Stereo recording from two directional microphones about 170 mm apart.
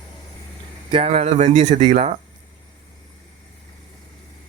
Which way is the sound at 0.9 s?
35° right (ahead or behind).